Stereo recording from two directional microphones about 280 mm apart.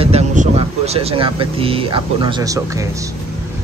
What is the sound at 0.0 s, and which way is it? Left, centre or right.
Speech, right.